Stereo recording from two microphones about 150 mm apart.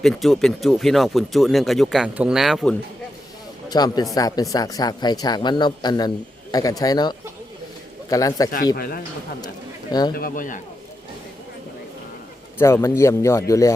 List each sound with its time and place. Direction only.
0.0 s speech: centre (ahead or behind)
3.7 s a man's voice: 25° left (ahead or behind)
8.7 s speech: 90° left
10.2 s a man's voice: 70° left (ahead or behind)
12.5 s speech: 15° left (ahead or behind)